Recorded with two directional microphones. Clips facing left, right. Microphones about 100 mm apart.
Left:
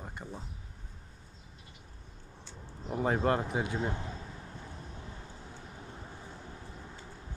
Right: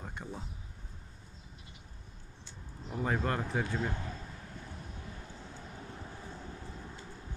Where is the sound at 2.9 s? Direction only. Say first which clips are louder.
Left 4 dB; 30° left (ahead or behind).